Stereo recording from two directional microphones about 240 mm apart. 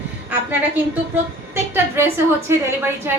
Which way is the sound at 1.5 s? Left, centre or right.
Centre.